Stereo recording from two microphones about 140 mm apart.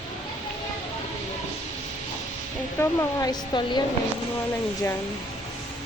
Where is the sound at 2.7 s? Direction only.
25° left (ahead or behind).